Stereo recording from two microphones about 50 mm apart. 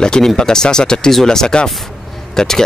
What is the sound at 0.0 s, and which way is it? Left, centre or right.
Speech, centre.